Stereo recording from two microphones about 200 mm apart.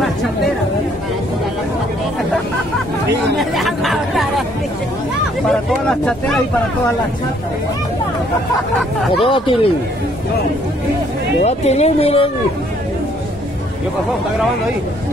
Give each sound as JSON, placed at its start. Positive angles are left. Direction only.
{"t": 3.3, "sound": "chatter", "side_deg": 0}
{"t": 5.5, "sound": "speech", "side_deg": 0}
{"t": 9.2, "sound": "speech", "side_deg": 25}
{"t": 11.4, "sound": "speech", "side_deg": 35}